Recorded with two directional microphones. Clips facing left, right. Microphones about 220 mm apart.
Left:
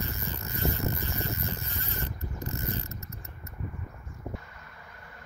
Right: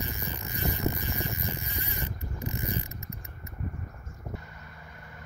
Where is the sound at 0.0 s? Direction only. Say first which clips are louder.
Even; 15° right (ahead or behind).